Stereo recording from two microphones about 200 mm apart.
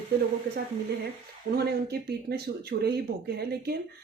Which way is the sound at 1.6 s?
55° right (ahead or behind).